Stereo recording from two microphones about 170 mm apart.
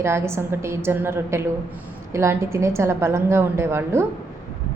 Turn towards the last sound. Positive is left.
turn(degrees=-15)  # may be behind; listen again after turning